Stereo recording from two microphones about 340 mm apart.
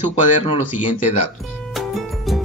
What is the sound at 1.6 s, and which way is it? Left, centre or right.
Music, centre.